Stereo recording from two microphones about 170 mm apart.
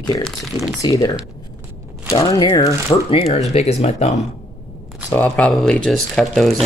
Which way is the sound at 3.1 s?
35° left (ahead or behind).